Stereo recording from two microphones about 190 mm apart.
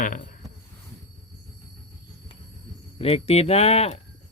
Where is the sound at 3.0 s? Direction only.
30° left (ahead or behind).